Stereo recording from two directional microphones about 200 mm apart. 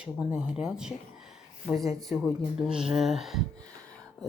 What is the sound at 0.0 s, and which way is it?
Speech, 5° right (ahead or behind).